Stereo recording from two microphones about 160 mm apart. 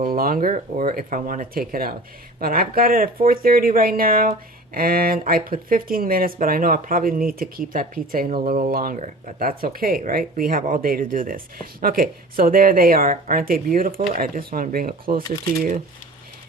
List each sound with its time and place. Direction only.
0.0 s speech: 65° right (ahead or behind)